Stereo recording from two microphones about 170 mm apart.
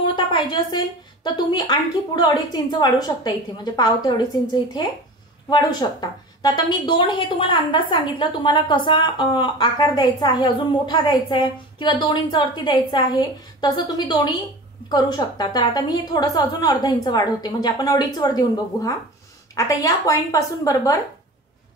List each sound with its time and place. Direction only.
0.0 s a woman's voice: 30° left (ahead or behind)
5.5 s a woman's voice: 25° left (ahead or behind)